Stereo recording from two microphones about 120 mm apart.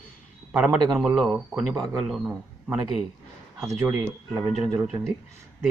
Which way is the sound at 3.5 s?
20° right (ahead or behind).